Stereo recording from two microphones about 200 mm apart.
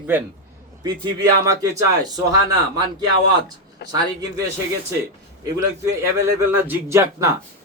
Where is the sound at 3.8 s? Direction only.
55° left (ahead or behind).